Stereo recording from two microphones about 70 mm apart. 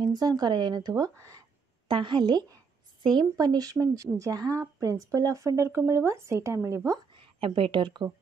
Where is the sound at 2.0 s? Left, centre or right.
Right.